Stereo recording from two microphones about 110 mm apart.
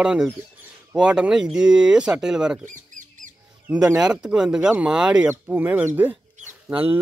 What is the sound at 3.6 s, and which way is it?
Speech, 10° right (ahead or behind).